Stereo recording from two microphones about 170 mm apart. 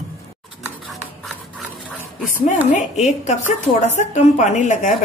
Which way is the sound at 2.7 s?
45° left (ahead or behind).